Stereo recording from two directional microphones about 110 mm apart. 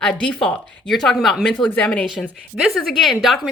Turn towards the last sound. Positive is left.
turn(degrees=0)  # may be behind; listen again after turning